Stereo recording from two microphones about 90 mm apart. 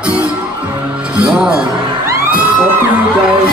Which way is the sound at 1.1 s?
10° right (ahead or behind).